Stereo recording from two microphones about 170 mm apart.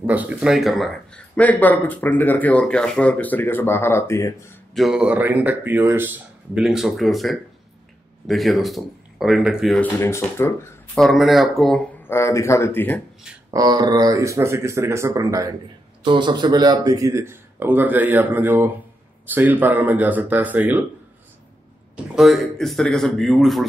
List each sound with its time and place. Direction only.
0.0 s speech: 10° right (ahead or behind); by 4.6 s 15° left (ahead or behind)
4.7 s a man's voice: centre (ahead or behind)
9.8 s speech: 10° left (ahead or behind)
11.0 s a man's voice: centre (ahead or behind)
12.1 s speech: 15° left (ahead or behind)
13.5 s speech: 20° right (ahead or behind)
21.9 s a man's voice: centre (ahead or behind)